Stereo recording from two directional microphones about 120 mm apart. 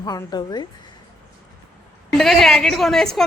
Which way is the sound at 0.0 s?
35° left (ahead or behind).